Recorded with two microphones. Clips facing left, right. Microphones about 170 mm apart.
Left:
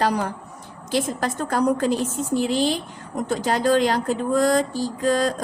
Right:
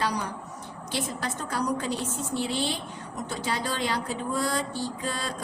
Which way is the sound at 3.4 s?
45° left (ahead or behind).